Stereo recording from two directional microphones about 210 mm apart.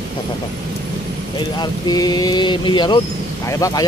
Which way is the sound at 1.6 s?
20° left (ahead or behind).